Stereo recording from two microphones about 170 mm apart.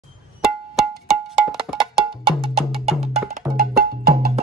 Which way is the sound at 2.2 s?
35° right (ahead or behind).